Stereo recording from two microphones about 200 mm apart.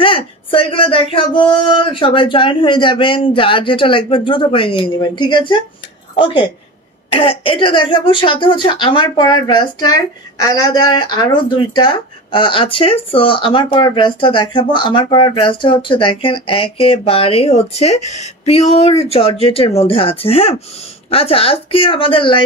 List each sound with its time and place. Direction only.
0.0 s speech: 25° left (ahead or behind)